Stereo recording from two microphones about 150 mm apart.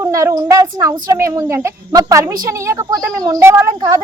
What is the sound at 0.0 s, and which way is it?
A woman's voice, 20° right (ahead or behind).